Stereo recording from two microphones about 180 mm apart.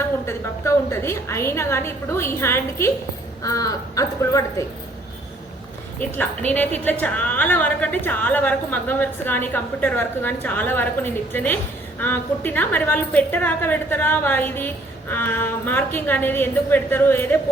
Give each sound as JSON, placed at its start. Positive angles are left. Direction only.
{"t": 0.3, "sound": "a woman's voice", "side_deg": 15}
{"t": 6.0, "sound": "a woman's voice", "side_deg": 10}